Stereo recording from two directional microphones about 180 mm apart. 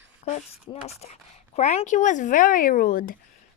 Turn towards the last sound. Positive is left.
turn(degrees=50)  # may be behind; listen again after turning